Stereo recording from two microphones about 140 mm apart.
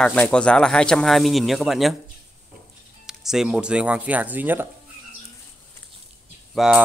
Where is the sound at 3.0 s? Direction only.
5° right (ahead or behind).